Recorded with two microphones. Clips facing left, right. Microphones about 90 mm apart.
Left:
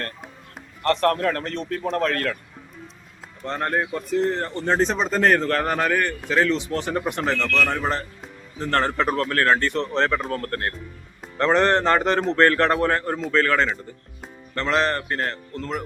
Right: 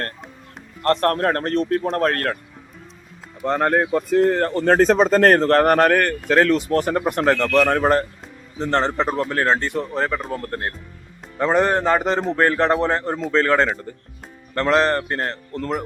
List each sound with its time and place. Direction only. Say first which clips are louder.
0.8 s speech: right 2 dB; 40° right (ahead or behind)
3.5 s speech: right 6 dB; 70° right (ahead or behind)
4.8 s speech: right 7 dB; 45° right (ahead or behind)
5.6 s speech: right 7 dB; 60° right (ahead or behind); by 8.0 s 45° right (ahead or behind)
8.5 s speech: right 2 dB; 25° right (ahead or behind)
9.8 s speech: left 1 dB; 10° right (ahead or behind); by 15.8 s 40° right (ahead or behind)